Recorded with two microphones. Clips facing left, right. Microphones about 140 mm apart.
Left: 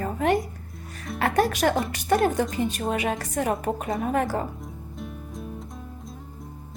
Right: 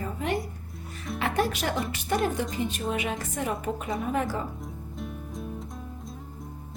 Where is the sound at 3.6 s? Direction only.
50° left (ahead or behind).